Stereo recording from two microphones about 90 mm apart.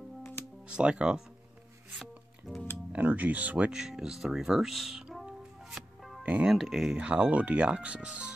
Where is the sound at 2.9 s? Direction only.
15° right (ahead or behind); by 6.1 s centre (ahead or behind).